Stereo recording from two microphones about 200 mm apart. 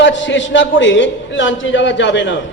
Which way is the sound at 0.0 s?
65° left (ahead or behind).